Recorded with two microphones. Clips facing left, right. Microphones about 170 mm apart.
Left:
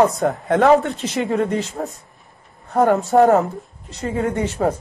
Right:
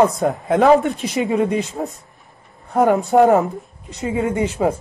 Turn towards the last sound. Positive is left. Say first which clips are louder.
# right 1 dB
turn(degrees=-10)  # may be behind; listen again after turning